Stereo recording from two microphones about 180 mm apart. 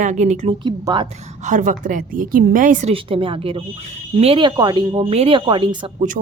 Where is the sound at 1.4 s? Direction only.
45° right (ahead or behind).